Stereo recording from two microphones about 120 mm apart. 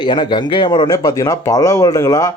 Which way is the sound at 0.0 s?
40° left (ahead or behind).